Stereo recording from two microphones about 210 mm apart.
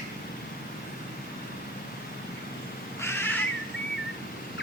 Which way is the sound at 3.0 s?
10° left (ahead or behind).